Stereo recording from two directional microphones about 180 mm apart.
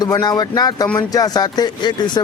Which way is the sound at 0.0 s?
20° left (ahead or behind).